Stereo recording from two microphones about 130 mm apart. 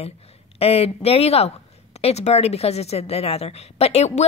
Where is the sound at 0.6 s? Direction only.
50° left (ahead or behind).